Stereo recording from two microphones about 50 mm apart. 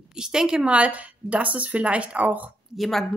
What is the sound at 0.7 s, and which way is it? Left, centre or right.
A woman's voice, right.